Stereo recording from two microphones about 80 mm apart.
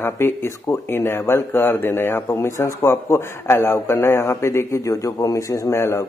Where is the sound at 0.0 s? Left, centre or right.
Left.